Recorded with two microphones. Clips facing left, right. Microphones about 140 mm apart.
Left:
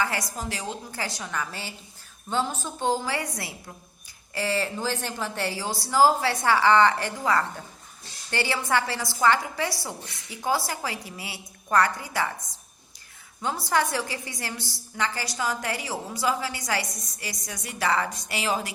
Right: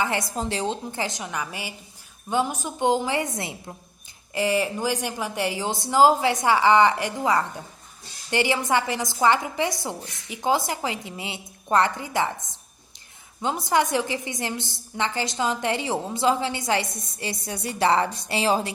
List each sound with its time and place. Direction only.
0.0 s a woman's voice: 25° right (ahead or behind)